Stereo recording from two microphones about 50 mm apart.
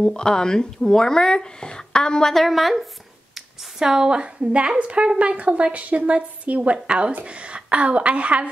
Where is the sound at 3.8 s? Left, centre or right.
Centre.